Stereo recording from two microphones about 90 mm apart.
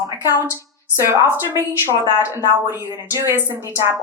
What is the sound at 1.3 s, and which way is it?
Speech, 25° right (ahead or behind).